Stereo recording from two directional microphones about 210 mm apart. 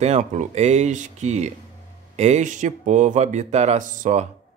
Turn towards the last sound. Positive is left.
turn(degrees=-35)  # may be behind; listen again after turning